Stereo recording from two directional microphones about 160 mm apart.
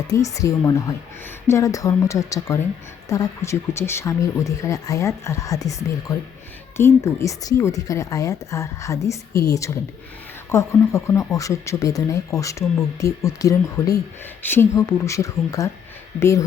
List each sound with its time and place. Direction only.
0.1 s speech: 20° left (ahead or behind)